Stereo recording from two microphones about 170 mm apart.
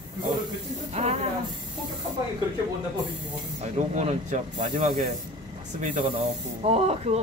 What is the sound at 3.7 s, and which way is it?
Speech, 45° right (ahead or behind).